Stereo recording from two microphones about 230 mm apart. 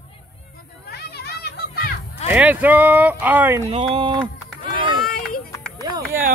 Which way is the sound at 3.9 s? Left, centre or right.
Right.